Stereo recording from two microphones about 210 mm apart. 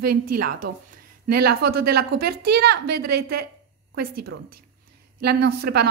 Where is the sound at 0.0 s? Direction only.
45° right (ahead or behind).